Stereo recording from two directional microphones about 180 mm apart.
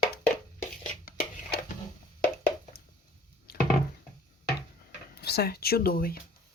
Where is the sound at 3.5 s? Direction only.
60° left (ahead or behind).